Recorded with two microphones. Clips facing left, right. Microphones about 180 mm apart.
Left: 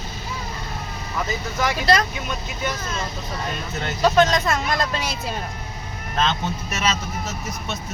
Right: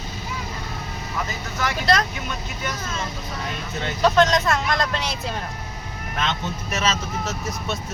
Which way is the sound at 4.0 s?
Centre (ahead or behind).